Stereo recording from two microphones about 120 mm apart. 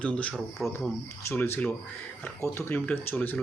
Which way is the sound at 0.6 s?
Centre (ahead or behind).